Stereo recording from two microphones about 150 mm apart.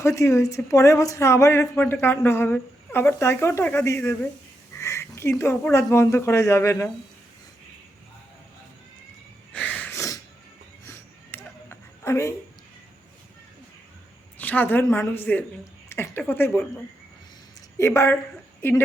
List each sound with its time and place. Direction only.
0.0 s speech: 20° left (ahead or behind)
9.5 s a sound: 10° left (ahead or behind)
14.3 s speech: 10° left (ahead or behind)
17.7 s speech: 20° left (ahead or behind)